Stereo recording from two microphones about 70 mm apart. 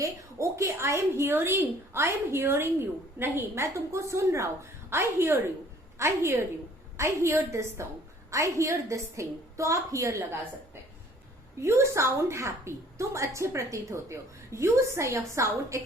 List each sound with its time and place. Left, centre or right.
0.0 s a woman's voice: right
11.6 s a woman's voice: right